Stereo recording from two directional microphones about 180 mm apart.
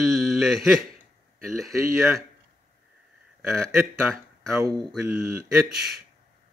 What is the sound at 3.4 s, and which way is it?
Speech, centre (ahead or behind).